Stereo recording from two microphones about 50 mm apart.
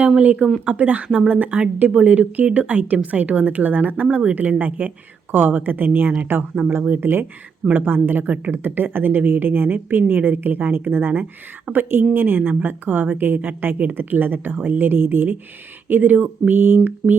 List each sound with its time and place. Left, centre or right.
0.2 s a woman's voice: right